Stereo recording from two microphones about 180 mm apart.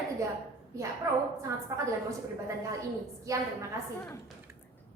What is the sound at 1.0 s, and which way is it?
A woman's voice, 20° right (ahead or behind).